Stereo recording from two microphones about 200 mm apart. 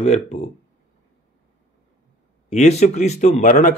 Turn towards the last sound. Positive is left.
turn(degrees=40)  # may be behind; listen again after turning